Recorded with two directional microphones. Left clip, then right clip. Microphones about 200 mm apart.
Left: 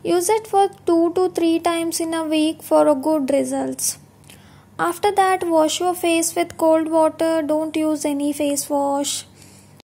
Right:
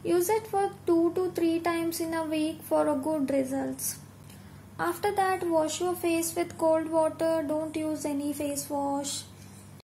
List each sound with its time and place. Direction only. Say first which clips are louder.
0.0 s a woman's voice: left 8 dB; 40° left (ahead or behind)